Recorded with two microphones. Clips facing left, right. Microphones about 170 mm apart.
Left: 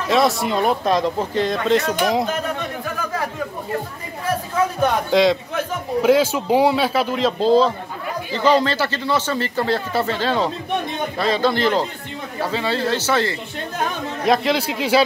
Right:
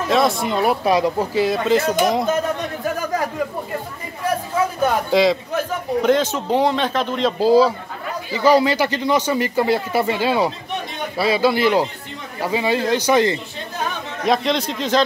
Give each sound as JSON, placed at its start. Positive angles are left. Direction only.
{"t": 0.1, "sound": "speech", "side_deg": 0}
{"t": 4.8, "sound": "speech", "side_deg": 0}
{"t": 14.2, "sound": "speech", "side_deg": 0}